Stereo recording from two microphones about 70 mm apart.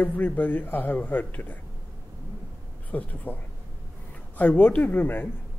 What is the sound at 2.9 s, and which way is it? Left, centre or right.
A woman's voice, left.